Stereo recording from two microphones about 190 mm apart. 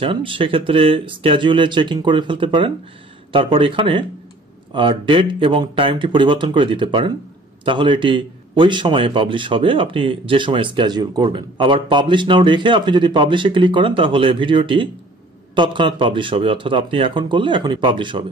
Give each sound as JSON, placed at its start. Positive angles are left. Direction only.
{"t": 0.0, "sound": "a man's voice", "side_deg": -25}